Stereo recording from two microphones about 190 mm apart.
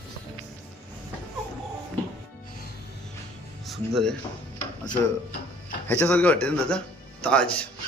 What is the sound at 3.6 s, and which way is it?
Speech, centre (ahead or behind).